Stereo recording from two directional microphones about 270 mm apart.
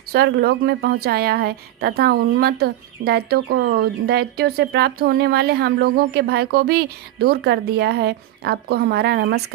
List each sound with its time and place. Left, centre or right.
0.1 s a woman's voice: right